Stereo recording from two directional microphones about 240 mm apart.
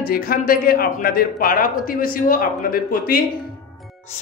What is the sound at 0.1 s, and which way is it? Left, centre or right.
A man's voice, left.